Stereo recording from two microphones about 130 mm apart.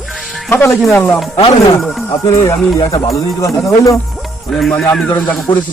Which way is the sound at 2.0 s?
25° left (ahead or behind).